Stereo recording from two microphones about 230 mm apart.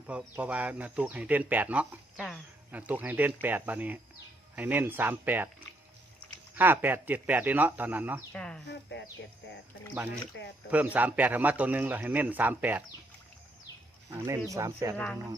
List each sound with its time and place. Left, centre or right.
0.1 s speech: centre
6.6 s speech: centre
8.3 s speech: centre
8.6 s speech: left
10.3 s speech: left
10.7 s speech: centre
14.2 s speech: centre
14.9 s speech: centre